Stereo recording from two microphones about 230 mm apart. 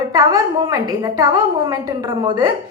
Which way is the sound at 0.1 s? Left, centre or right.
Centre.